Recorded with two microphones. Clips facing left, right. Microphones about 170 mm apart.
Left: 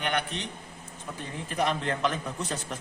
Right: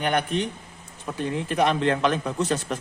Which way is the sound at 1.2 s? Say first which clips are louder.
Right 7 dB; 80° right.